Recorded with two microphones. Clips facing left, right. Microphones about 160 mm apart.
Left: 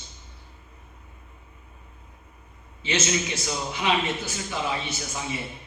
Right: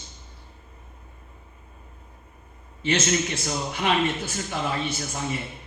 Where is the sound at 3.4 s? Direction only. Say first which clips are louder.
Right 1 dB; 50° right (ahead or behind).